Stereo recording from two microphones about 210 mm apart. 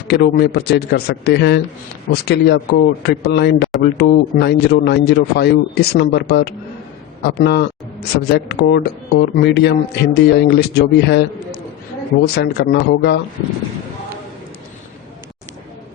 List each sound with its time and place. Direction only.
0.1 s speech: 50° left (ahead or behind)